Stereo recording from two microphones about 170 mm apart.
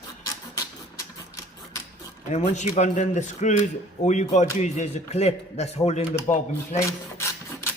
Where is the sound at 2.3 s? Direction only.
45° left (ahead or behind).